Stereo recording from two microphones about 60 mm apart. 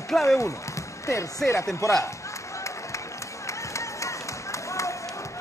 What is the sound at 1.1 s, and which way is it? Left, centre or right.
Speech, left.